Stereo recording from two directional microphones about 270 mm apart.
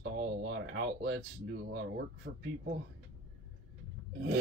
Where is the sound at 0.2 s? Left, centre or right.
Right.